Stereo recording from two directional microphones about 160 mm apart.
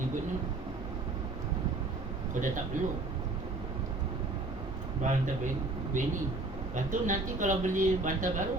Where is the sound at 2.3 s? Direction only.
55° right (ahead or behind).